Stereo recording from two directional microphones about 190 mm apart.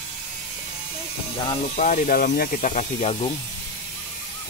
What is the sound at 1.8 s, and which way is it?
Speech, 45° left (ahead or behind).